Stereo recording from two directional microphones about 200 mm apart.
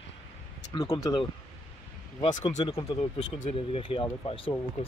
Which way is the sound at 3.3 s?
40° left (ahead or behind).